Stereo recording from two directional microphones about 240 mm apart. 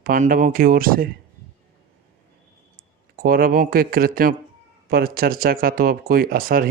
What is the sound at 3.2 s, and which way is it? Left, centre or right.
Speech, right.